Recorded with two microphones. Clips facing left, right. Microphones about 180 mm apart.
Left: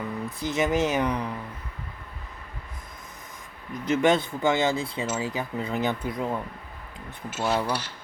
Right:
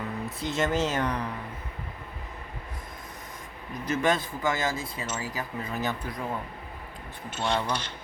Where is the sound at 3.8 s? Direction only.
25° left (ahead or behind).